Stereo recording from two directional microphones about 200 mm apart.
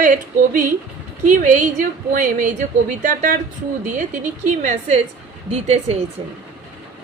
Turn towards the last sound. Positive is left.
turn(degrees=-30)  # may be behind; listen again after turning